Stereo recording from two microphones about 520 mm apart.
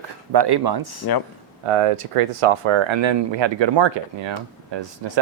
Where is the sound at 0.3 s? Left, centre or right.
Right.